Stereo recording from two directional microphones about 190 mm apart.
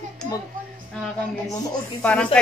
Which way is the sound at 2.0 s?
5° left (ahead or behind).